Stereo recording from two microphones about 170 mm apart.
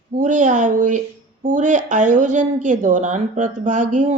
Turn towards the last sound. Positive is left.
turn(degrees=-45)  # may be behind; listen again after turning